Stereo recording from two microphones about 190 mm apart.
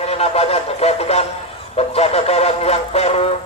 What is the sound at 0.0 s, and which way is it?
Music, 35° left (ahead or behind).